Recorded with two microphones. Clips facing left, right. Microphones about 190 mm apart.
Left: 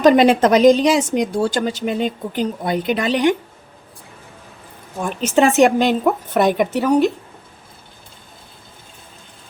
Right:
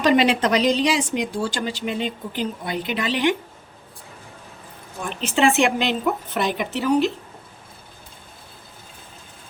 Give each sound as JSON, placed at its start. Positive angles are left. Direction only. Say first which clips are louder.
{"t": 0.0, "sound": "a woman's voice", "louder": "left 6 dB", "side_deg": 45}
{"t": 4.9, "sound": "a woman's voice", "louder": "left 6 dB", "side_deg": 45}